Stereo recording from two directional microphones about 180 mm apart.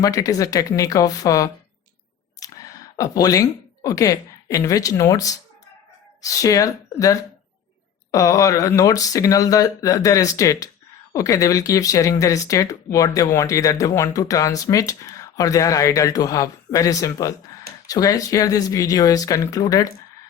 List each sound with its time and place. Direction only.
0.0 s speech: 20° left (ahead or behind)
2.4 s a sound: 20° left (ahead or behind)
3.8 s speech: 20° left (ahead or behind)